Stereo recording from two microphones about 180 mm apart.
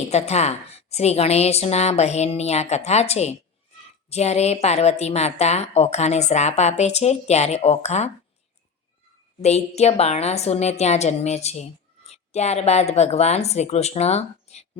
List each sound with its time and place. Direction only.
0.1 s a woman's voice: 35° left (ahead or behind)
9.4 s a woman's voice: 35° left (ahead or behind)